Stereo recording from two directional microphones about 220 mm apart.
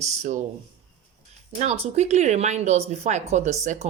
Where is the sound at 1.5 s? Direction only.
30° right (ahead or behind).